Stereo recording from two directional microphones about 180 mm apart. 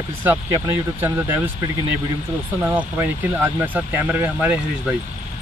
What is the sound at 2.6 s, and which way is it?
Speech, 10° right (ahead or behind).